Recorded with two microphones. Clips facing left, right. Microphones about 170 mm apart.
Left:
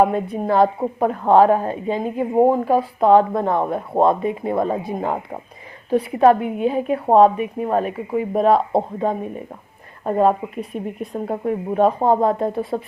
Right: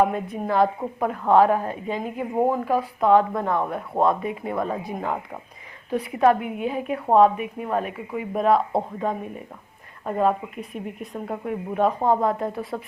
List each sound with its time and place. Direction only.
0.0 s a woman's voice: 35° left (ahead or behind)